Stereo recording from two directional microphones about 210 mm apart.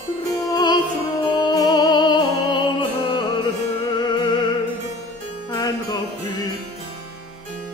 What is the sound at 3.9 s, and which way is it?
Music, 20° left (ahead or behind).